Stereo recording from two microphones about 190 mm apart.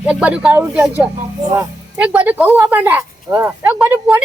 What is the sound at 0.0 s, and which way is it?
Speech, 5° right (ahead or behind).